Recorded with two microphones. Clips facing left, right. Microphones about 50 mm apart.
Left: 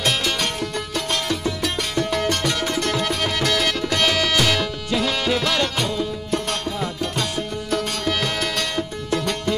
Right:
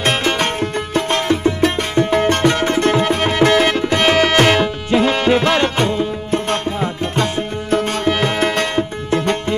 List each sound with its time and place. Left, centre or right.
0.0 s music: right